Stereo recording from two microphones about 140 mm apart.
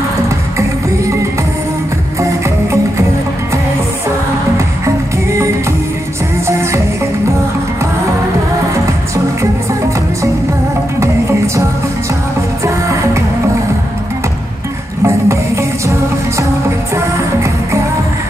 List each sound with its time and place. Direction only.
2.2 s music: 20° right (ahead or behind)
6.4 s music: 20° right (ahead or behind)
11.0 s music: 20° right (ahead or behind)
12.6 s music: 20° right (ahead or behind)
15.0 s music: 20° right (ahead or behind)